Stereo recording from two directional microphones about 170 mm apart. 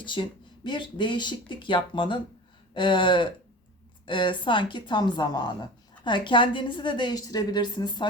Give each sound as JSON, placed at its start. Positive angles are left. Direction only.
{"t": 0.0, "sound": "speech", "side_deg": 30}